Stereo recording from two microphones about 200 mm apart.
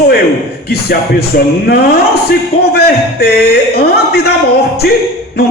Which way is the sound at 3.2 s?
50° left (ahead or behind).